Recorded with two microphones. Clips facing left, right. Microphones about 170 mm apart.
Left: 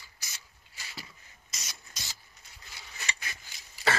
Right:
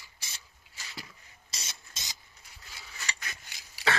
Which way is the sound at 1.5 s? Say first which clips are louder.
Even; 25° right (ahead or behind).